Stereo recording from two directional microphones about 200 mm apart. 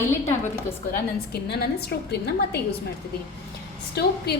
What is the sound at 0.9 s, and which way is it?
A woman's voice, 55° left (ahead or behind).